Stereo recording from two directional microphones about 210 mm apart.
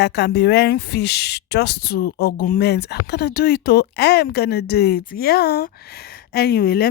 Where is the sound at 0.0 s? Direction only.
55° left (ahead or behind).